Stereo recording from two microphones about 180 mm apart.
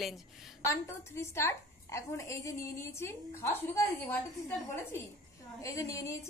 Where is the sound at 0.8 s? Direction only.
15° left (ahead or behind).